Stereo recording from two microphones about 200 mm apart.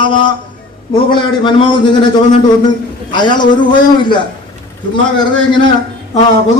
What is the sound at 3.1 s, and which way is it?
Speech, 20° left (ahead or behind).